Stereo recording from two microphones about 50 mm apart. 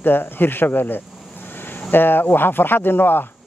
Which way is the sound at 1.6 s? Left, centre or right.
Left.